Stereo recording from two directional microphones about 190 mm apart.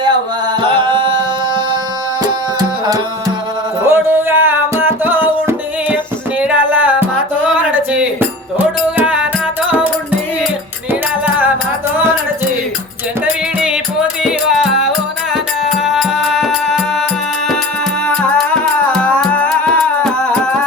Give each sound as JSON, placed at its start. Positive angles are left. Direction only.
{"t": 0.6, "sound": "music", "side_deg": -25}
{"t": 2.2, "sound": "tabla", "side_deg": -20}
{"t": 3.8, "sound": "music", "side_deg": -10}
{"t": 13.2, "sound": "music", "side_deg": -5}
{"t": 15.8, "sound": "music", "side_deg": 0}
{"t": 18.2, "sound": "music", "side_deg": 5}